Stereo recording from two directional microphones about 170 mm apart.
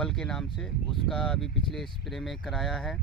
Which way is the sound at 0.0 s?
5° left (ahead or behind).